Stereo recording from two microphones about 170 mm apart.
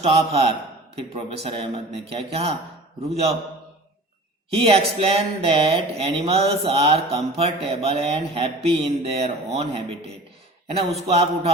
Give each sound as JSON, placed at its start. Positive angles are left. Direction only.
{"t": 0.0, "sound": "speech", "side_deg": -35}
{"t": 4.5, "sound": "speech", "side_deg": -35}